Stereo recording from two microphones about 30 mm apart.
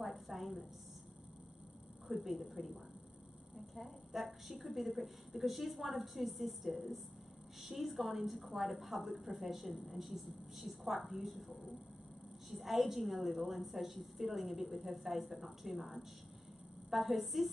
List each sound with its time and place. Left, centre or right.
0.0 s a woman's voice: centre
2.0 s a woman's voice: centre
4.1 s a woman's voice: centre